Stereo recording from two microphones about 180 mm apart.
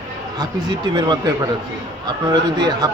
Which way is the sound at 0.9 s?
25° right (ahead or behind).